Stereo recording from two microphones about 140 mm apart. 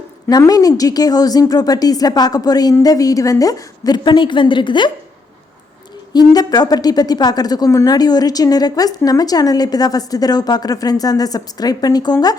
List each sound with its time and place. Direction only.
0.3 s a woman's voice: 25° left (ahead or behind)
6.1 s a woman's voice: 30° left (ahead or behind)